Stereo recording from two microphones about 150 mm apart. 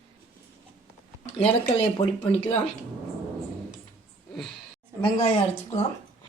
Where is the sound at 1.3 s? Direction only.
40° left (ahead or behind).